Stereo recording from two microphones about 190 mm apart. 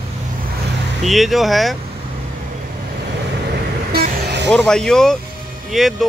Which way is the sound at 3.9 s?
55° right (ahead or behind).